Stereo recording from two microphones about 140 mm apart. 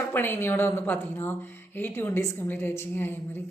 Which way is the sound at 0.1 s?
15° left (ahead or behind).